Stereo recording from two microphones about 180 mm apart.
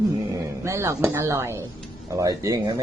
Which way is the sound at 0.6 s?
15° right (ahead or behind).